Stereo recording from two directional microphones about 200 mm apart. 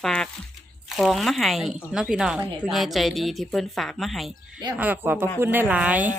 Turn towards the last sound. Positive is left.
turn(degrees=-5)  # may be behind; listen again after turning